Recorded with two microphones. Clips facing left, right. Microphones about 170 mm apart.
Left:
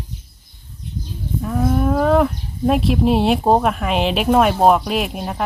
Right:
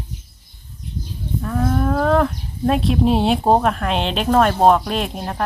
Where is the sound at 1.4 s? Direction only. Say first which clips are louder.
Left 2 dB; 5° left (ahead or behind).